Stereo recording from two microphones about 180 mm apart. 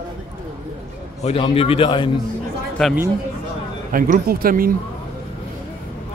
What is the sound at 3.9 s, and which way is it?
Speech, 50° right (ahead or behind).